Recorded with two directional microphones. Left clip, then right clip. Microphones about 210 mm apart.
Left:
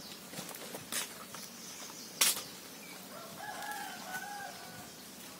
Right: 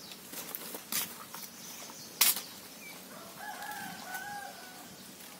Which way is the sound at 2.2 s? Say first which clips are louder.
Right 1 dB; 30° right (ahead or behind).